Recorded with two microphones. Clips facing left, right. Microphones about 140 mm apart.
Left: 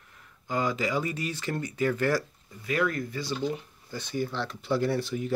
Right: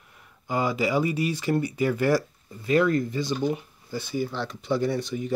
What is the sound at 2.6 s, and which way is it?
Speech, 30° right (ahead or behind).